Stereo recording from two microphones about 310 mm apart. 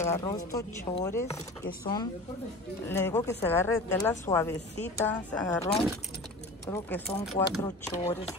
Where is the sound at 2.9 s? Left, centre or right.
Centre.